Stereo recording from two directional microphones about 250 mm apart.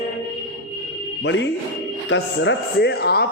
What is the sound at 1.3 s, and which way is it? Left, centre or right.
A man's voice, left.